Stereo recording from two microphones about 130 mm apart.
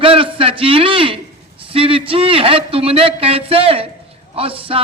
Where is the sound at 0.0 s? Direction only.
45° right (ahead or behind).